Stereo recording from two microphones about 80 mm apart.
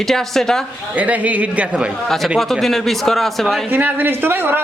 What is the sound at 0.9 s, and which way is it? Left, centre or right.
Speech, centre.